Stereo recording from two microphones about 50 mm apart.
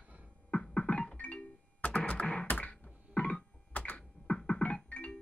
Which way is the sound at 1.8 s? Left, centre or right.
Left.